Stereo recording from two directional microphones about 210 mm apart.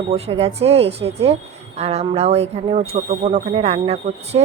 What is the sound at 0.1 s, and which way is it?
A woman's voice, 30° right (ahead or behind).